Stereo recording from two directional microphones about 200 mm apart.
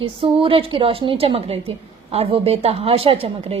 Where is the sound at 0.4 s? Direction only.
25° right (ahead or behind).